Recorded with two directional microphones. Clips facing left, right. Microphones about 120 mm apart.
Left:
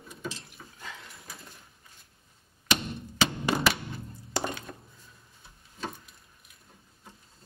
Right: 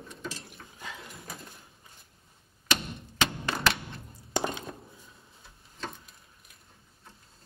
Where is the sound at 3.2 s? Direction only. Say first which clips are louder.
Left 2 dB; 5° left (ahead or behind).